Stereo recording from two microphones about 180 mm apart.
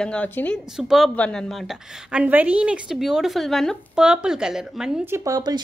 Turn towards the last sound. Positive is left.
turn(degrees=-20)  # may be behind; listen again after turning